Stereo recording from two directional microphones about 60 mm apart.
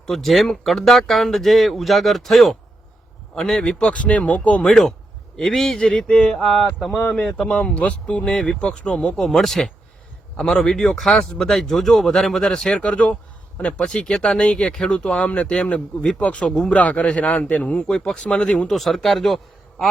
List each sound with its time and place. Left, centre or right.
0.0 s speech: centre
3.8 s speech: centre
4.6 s speech: centre
18.7 s speech: centre